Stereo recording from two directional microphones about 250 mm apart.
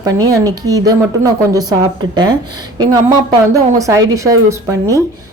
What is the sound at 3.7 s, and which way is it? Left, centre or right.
Speech, centre.